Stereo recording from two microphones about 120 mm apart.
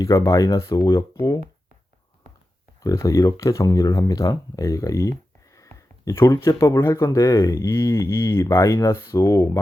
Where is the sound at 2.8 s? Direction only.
25° left (ahead or behind).